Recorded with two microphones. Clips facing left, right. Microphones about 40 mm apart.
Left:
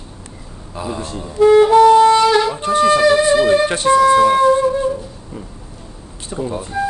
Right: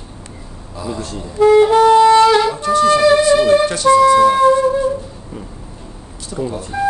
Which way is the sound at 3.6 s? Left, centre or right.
Left.